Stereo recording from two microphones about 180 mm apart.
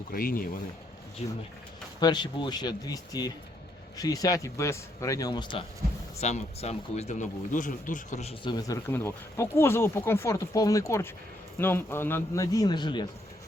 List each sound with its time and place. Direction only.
0.1 s speech: 55° left (ahead or behind)
1.2 s speech: 35° left (ahead or behind)
2.0 s speech: 25° left (ahead or behind)
6.1 s speech: 35° left (ahead or behind)
8.5 s speech: 20° left (ahead or behind)